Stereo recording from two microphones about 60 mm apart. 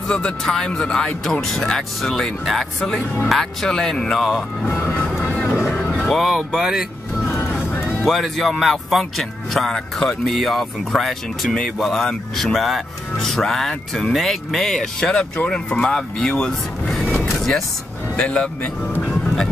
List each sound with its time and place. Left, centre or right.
0.1 s speech: centre
5.2 s music: left
6.0 s speech: centre
7.2 s vehicle: left
8.0 s speech: centre
17.0 s vehicle: centre
17.3 s vehicle: centre
18.1 s speech: centre
19.0 s music: centre